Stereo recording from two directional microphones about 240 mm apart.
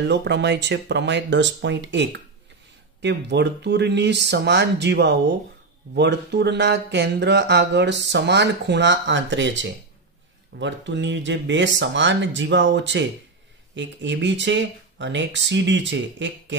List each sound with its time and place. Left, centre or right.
0.1 s speech: right